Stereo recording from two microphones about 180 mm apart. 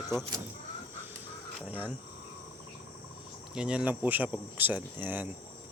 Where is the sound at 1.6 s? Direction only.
10° right (ahead or behind).